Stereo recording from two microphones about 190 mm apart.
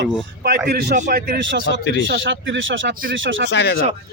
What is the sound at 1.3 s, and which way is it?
Speech, 65° right (ahead or behind).